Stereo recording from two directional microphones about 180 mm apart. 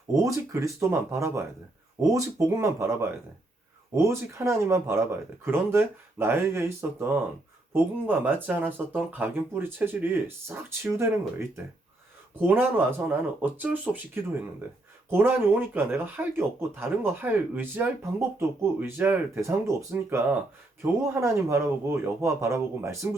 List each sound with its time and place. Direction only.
0.1 s speech: 15° right (ahead or behind)